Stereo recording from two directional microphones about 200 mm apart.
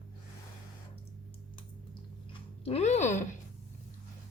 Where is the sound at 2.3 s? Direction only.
30° left (ahead or behind).